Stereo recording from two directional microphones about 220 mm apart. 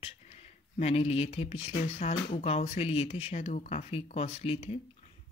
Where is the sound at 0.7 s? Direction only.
30° left (ahead or behind).